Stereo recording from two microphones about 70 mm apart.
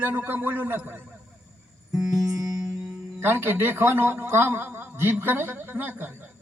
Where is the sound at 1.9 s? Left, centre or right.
Right.